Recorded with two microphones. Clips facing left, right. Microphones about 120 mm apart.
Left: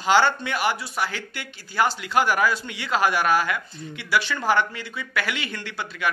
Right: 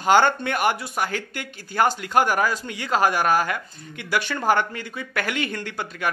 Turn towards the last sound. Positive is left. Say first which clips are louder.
# right 1 dB
turn(degrees=-45)  # may be behind; listen again after turning